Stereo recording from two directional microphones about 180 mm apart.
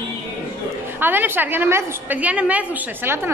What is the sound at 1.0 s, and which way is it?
A woman's voice, 10° right (ahead or behind).